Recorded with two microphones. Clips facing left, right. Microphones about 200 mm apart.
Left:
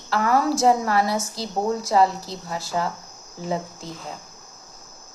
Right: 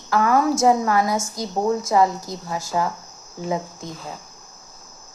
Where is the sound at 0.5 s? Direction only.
30° left (ahead or behind).